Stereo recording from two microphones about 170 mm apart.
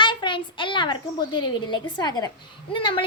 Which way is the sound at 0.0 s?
30° left (ahead or behind).